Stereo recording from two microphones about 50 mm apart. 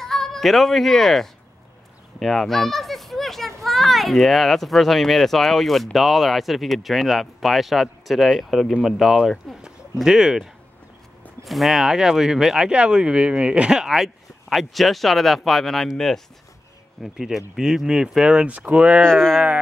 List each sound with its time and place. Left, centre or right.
0.0 s a child's voice: centre
9.9 s speech: centre
12.7 s speech: right; by 15.9 s centre
17.0 s speech: centre; by 19.0 s right
19.0 s speech: centre